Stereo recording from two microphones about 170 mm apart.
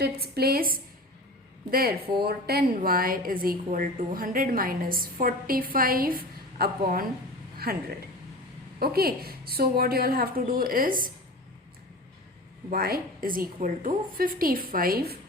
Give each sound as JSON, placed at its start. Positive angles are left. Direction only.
{"t": 0.0, "sound": "a woman's voice", "side_deg": -65}
{"t": 12.7, "sound": "a woman's voice", "side_deg": -60}